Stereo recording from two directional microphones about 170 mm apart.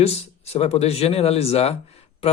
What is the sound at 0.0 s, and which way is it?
Speech, 35° left (ahead or behind).